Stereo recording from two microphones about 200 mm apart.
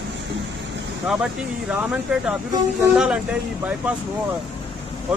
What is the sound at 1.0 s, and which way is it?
Speech, centre (ahead or behind).